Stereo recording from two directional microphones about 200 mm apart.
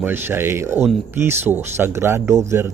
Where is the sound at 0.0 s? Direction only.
10° right (ahead or behind).